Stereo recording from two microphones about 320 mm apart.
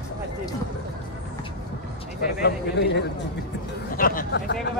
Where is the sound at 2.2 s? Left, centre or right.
Left.